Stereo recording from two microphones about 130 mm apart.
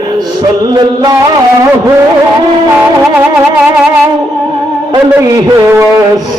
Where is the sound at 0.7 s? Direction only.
30° right (ahead or behind).